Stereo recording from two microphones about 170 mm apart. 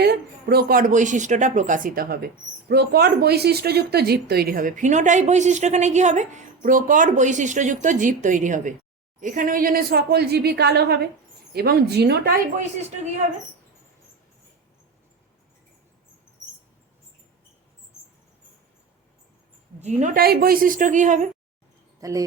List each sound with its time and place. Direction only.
0.0 s a woman's voice: 70° right (ahead or behind)
19.8 s speech: 45° right (ahead or behind)
20.1 s speech: 65° right (ahead or behind); by 21.2 s 45° right (ahead or behind)
22.0 s speech: 20° right (ahead or behind)